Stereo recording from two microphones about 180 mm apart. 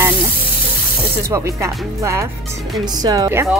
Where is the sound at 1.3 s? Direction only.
15° right (ahead or behind).